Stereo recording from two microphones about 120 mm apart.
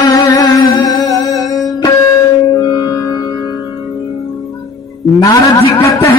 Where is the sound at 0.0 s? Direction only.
30° left (ahead or behind).